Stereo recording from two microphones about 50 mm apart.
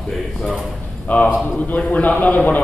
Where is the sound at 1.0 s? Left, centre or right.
Left.